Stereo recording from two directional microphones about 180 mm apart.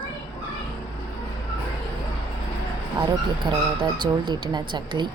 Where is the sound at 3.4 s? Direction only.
25° right (ahead or behind).